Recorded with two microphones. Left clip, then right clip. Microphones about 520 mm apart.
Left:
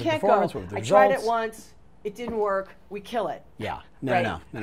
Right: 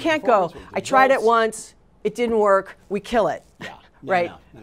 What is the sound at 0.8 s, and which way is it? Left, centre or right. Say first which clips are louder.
A woman's voice: right 3 dB; right.